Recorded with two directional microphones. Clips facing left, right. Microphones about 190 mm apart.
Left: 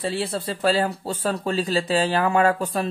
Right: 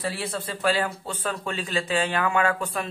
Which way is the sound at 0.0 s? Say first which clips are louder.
Left 4 dB; 30° left (ahead or behind).